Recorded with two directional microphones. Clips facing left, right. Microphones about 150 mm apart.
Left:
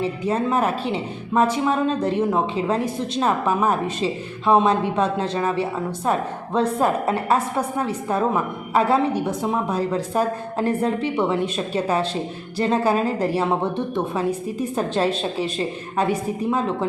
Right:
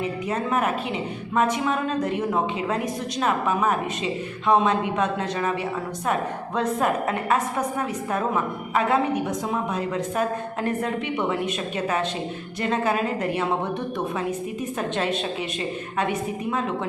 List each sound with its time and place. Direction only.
0.0 s a woman's voice: 30° left (ahead or behind)
12.5 s a woman's voice: 30° left (ahead or behind)
14.8 s a woman's voice: 35° left (ahead or behind)